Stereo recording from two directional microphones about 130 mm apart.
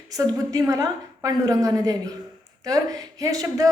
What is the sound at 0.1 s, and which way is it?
A woman's voice, 30° right (ahead or behind).